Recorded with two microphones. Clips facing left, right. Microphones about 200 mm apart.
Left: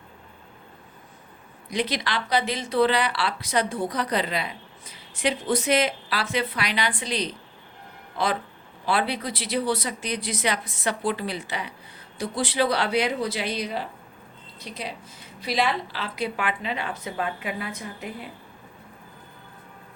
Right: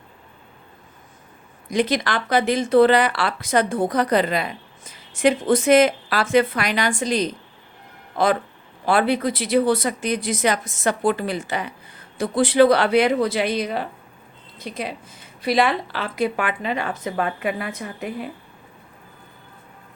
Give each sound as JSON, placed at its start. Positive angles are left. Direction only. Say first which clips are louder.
{"t": 1.7, "sound": "speech", "louder": "right 6 dB", "side_deg": -50}